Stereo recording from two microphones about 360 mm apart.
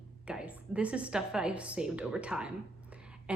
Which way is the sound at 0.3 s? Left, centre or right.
Centre.